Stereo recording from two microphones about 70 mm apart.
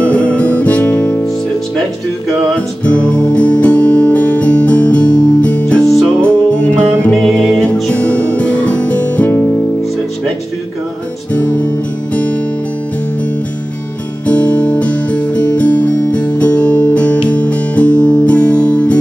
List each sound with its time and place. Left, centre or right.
0.0 s music: centre
2.8 s music: centre
7.2 s music: centre
7.9 s music: centre
14.2 s music: centre